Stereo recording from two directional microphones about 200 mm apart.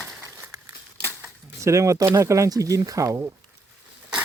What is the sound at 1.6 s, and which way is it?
Speech, 15° right (ahead or behind).